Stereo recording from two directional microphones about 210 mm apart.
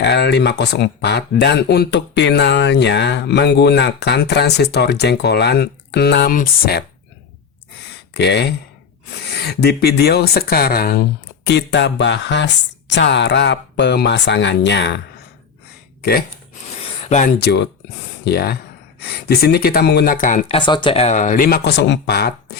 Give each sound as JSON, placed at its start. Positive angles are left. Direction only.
{"t": 0.0, "sound": "speech", "side_deg": 55}
{"t": 8.1, "sound": "speech", "side_deg": 55}
{"t": 16.0, "sound": "a sound", "side_deg": 45}
{"t": 17.0, "sound": "a sound", "side_deg": 35}
{"t": 17.4, "sound": "speech", "side_deg": 55}
{"t": 20.6, "sound": "speech", "side_deg": 20}